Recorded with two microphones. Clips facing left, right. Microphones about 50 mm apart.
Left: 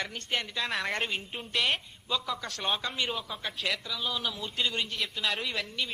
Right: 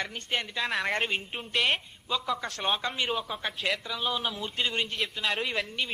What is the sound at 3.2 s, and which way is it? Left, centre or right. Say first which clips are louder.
Speech: right 2 dB; right.